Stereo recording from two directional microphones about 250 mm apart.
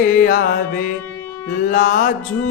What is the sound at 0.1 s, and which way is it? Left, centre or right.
Music, left.